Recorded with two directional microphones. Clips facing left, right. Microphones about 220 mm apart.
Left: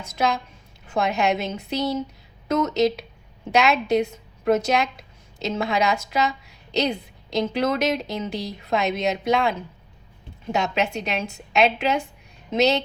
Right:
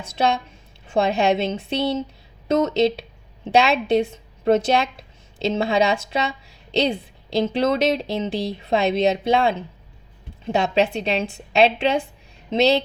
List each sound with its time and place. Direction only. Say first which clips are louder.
0.0 s a woman's voice: right 2 dB; 30° right (ahead or behind)